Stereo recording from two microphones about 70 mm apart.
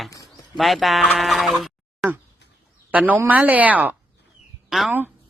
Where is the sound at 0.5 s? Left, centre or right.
Centre.